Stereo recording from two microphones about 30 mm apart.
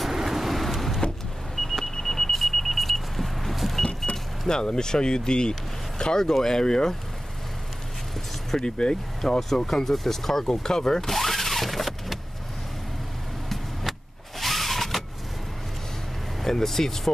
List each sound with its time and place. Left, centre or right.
0.0 s vehicle: centre
4.1 s speech: left
8.6 s speech: left
9.2 s speech: centre
11.1 s vehicle: centre
14.4 s power windows: centre
16.4 s speech: centre